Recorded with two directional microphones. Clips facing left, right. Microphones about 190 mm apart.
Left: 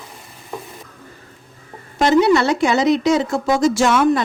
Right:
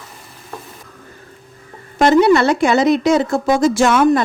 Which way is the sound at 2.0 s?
55° right (ahead or behind).